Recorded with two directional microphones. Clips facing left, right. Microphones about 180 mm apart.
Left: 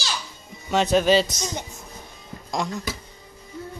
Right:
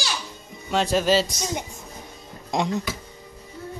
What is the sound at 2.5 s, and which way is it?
Speech, 25° right (ahead or behind).